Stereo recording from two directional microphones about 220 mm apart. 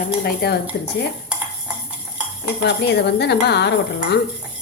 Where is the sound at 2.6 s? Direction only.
50° left (ahead or behind).